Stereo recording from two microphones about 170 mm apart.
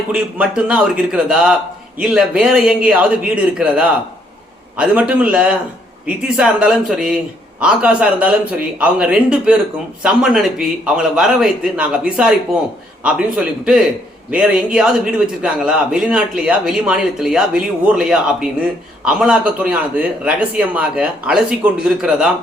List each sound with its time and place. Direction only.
0.1 s a man's voice: 5° right (ahead or behind)